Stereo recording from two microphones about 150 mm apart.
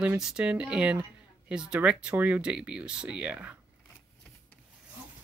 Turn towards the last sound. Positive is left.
turn(degrees=-10)  # may be behind; listen again after turning